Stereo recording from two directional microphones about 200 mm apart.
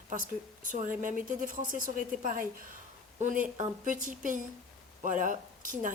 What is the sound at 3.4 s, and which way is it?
A woman's voice, 40° right (ahead or behind).